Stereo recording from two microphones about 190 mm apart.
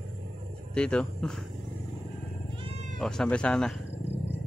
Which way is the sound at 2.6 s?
35° right (ahead or behind).